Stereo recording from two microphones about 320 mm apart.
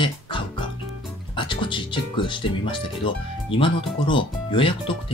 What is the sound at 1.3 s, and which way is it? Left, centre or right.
Speech, centre.